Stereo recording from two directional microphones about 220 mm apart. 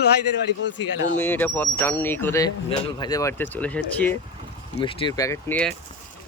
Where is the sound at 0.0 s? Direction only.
50° left (ahead or behind).